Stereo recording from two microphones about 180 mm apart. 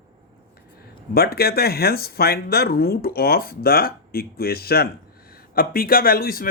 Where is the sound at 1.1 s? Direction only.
60° left (ahead or behind).